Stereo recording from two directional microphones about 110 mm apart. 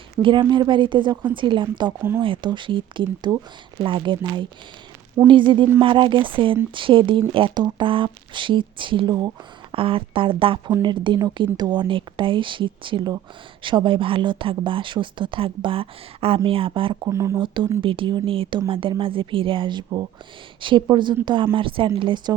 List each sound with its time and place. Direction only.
0.2 s speech: 50° right (ahead or behind)
2.0 s speech: 20° right (ahead or behind)
2.2 s speech: 50° right (ahead or behind)
9.7 s speech: 55° right (ahead or behind)
17.1 s speech: 25° right (ahead or behind)
17.4 s a woman's voice: 45° right (ahead or behind)